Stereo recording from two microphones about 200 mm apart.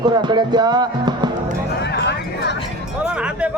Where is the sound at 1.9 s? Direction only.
60° left (ahead or behind).